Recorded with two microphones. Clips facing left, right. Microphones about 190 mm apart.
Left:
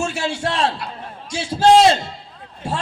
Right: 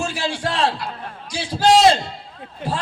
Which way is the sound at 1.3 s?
25° left (ahead or behind).